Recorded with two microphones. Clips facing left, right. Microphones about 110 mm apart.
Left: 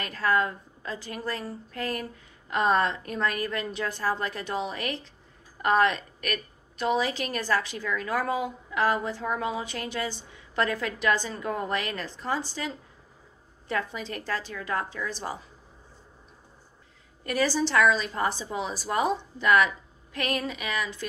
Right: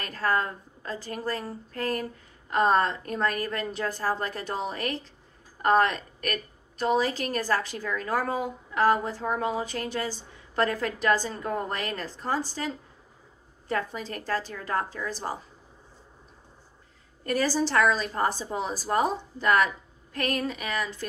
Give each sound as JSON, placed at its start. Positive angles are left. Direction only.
{"t": 0.0, "sound": "a woman's voice", "side_deg": -40}
{"t": 17.2, "sound": "a woman's voice", "side_deg": -40}